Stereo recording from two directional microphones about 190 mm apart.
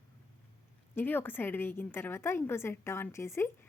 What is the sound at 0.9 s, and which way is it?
A woman's voice, 10° left (ahead or behind).